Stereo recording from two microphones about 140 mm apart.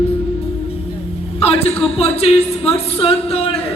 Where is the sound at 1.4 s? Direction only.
45° left (ahead or behind).